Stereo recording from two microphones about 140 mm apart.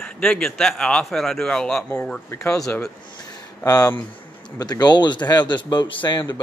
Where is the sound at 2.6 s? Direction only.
5° left (ahead or behind).